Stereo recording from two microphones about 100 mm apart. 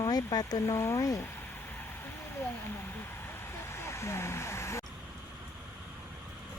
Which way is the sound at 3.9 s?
30° left (ahead or behind).